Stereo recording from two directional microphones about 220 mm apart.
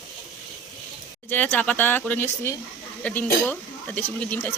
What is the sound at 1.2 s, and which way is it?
Speech, 5° left (ahead or behind).